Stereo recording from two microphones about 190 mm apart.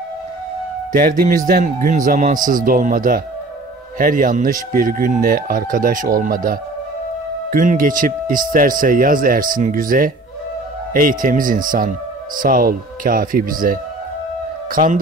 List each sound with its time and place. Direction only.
0.9 s speech: 50° right (ahead or behind)